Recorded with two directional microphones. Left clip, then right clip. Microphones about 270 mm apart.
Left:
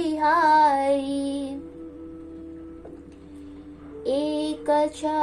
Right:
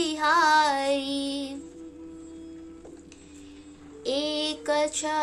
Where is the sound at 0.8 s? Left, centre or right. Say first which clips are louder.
Left 3 dB; right.